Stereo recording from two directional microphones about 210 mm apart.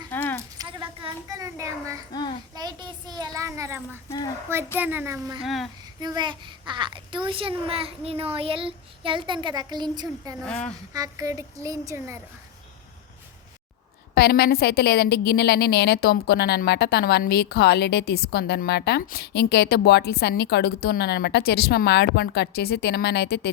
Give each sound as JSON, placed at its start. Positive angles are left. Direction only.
{"t": 0.1, "sound": "a sound", "side_deg": 10}
{"t": 0.6, "sound": "a sound", "side_deg": -20}
{"t": 2.1, "sound": "child singing", "side_deg": 20}
{"t": 2.6, "sound": "a sound", "side_deg": -20}
{"t": 4.8, "sound": "a woman's voice", "side_deg": -10}
{"t": 5.4, "sound": "speech", "side_deg": 0}
{"t": 6.0, "sound": "a child's voice", "side_deg": -20}
{"t": 10.4, "sound": "speech", "side_deg": 5}
{"t": 10.9, "sound": "a woman's voice", "side_deg": -15}
{"t": 14.2, "sound": "a woman's voice", "side_deg": 50}